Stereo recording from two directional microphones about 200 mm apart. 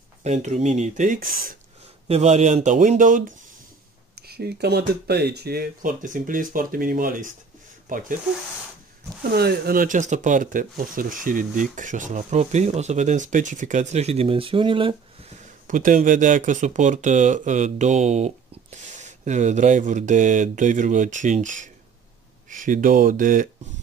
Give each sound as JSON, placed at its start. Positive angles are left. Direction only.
{"t": 0.2, "sound": "speech", "side_deg": -35}
{"t": 2.0, "sound": "speech", "side_deg": -35}
{"t": 4.3, "sound": "speech", "side_deg": -55}
{"t": 9.3, "sound": "speech", "side_deg": -50}
{"t": 15.6, "sound": "speech", "side_deg": -40}